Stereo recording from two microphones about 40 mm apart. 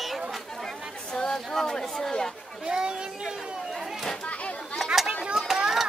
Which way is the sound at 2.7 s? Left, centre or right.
Centre.